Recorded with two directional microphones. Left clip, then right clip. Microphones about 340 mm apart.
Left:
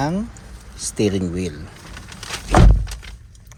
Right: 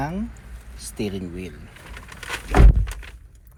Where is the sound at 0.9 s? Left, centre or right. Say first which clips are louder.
Left 9 dB; left.